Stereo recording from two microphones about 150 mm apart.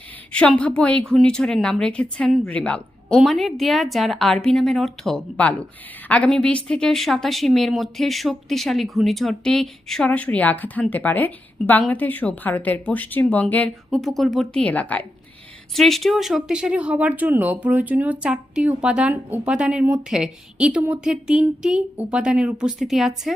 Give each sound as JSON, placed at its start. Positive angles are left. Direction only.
{"t": 0.3, "sound": "a woman's voice", "side_deg": 5}